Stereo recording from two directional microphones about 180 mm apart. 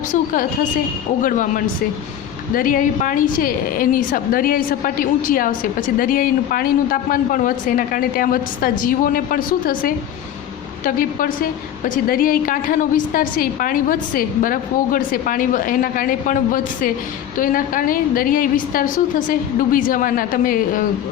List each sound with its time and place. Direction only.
0.1 s a woman's voice: 45° left (ahead or behind)